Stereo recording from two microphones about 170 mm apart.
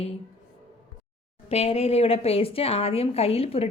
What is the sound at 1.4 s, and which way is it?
A woman's voice, 35° left (ahead or behind).